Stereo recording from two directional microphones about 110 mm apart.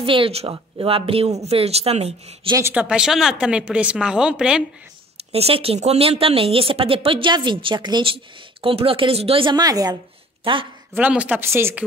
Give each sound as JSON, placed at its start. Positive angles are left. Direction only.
{"t": 0.0, "sound": "speech", "side_deg": -55}
{"t": 2.7, "sound": "a woman's voice", "side_deg": -10}
{"t": 5.1, "sound": "speech", "side_deg": -65}
{"t": 9.6, "sound": "a woman's voice", "side_deg": -35}
{"t": 10.4, "sound": "a woman's voice", "side_deg": -50}
{"t": 11.0, "sound": "a woman's voice", "side_deg": -10}